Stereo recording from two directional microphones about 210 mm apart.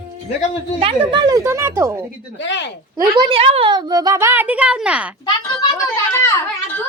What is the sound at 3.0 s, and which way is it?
A woman's voice, 20° right (ahead or behind).